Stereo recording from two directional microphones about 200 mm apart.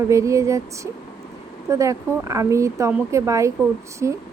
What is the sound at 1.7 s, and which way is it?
Speech, 15° right (ahead or behind).